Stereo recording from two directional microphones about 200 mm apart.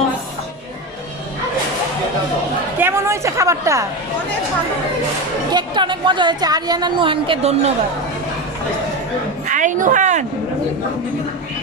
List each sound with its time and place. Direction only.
2.8 s a woman's voice: 15° right (ahead or behind)
5.5 s a woman's voice: 20° right (ahead or behind)
9.5 s a sound: 40° right (ahead or behind)